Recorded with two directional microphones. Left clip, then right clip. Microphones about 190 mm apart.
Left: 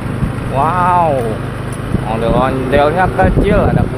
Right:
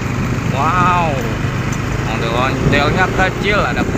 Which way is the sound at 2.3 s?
50° left (ahead or behind).